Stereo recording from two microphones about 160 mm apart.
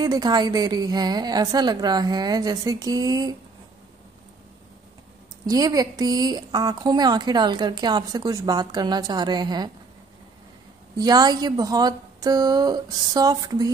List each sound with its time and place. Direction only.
0.0 s speech: 25° right (ahead or behind)
5.5 s speech: 20° right (ahead or behind)
11.0 s speech: 25° right (ahead or behind)